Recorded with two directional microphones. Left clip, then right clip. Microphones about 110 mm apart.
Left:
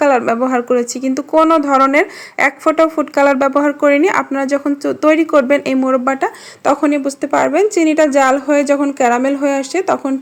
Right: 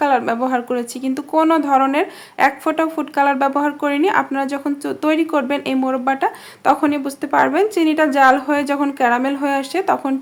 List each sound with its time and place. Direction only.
0.3 s speech: 20° left (ahead or behind)